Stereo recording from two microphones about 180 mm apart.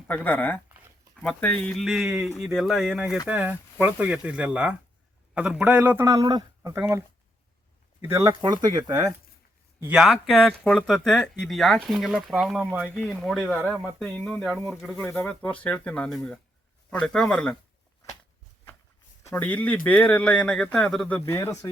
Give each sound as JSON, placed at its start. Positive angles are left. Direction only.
{"t": 0.1, "sound": "a man's voice", "side_deg": 10}
{"t": 6.1, "sound": "speech", "side_deg": -20}
{"t": 8.0, "sound": "speech", "side_deg": -15}
{"t": 9.8, "sound": "speech", "side_deg": -5}
{"t": 12.9, "sound": "a man's voice", "side_deg": 5}
{"t": 19.3, "sound": "a man's voice", "side_deg": 10}